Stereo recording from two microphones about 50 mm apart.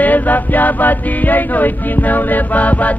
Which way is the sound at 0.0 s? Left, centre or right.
Left.